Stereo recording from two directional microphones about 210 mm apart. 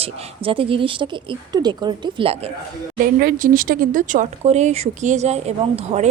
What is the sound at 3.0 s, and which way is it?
Speech, 45° right (ahead or behind).